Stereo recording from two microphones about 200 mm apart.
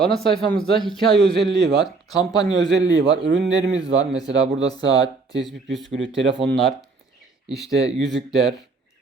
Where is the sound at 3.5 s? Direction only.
70° right (ahead or behind).